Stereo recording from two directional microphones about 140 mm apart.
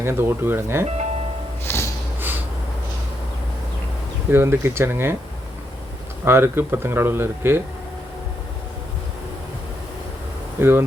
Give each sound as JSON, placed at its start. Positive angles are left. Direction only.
{"t": 0.0, "sound": "speech", "side_deg": -15}
{"t": 1.6, "sound": "music", "side_deg": 20}
{"t": 4.3, "sound": "speech", "side_deg": -20}
{"t": 6.2, "sound": "speech", "side_deg": -15}
{"t": 10.6, "sound": "speech", "side_deg": -15}